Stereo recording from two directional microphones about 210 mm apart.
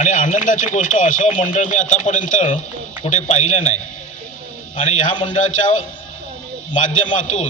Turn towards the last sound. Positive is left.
turn(degrees=35)  # may be behind; listen again after turning